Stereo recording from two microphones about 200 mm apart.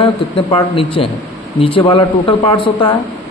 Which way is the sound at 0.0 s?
25° left (ahead or behind).